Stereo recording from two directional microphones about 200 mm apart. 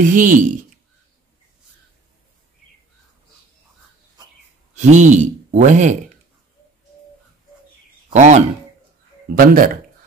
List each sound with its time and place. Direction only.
0.0 s speech: 40° right (ahead or behind)
4.7 s speech: 35° right (ahead or behind)
8.1 s speech: 35° right (ahead or behind)